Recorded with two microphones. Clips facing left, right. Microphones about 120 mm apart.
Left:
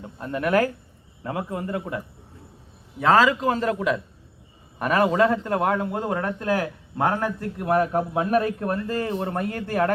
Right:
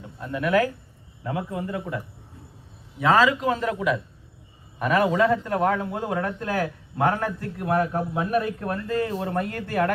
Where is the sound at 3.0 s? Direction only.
35° left (ahead or behind).